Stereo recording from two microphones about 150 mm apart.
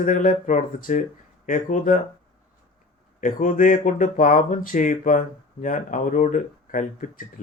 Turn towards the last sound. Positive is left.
turn(degrees=60)  # may be behind; listen again after turning